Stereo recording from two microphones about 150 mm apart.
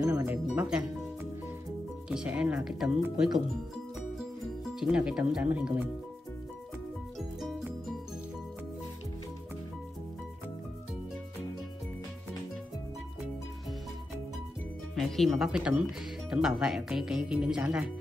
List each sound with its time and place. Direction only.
0.0 s speech: 20° right (ahead or behind)
0.5 s speech: 5° right (ahead or behind)
2.0 s speech: 5° right (ahead or behind)
4.6 s speech: 5° right (ahead or behind)
7.2 s music: centre (ahead or behind)
15.0 s speech: centre (ahead or behind)